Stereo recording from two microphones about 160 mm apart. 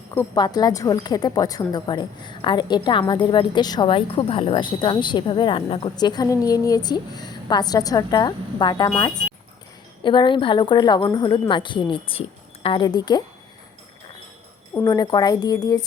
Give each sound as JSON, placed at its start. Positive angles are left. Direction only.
{"t": 0.3, "sound": "a woman's voice", "side_deg": 25}
{"t": 6.0, "sound": "a woman's voice", "side_deg": 25}
{"t": 14.7, "sound": "a woman's voice", "side_deg": 20}